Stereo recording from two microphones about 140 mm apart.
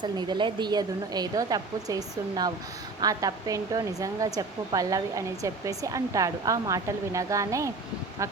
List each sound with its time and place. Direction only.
0.0 s speech: 30° right (ahead or behind)